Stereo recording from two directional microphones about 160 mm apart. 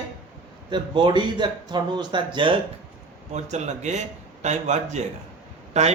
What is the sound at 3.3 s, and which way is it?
A man's voice, 45° right (ahead or behind).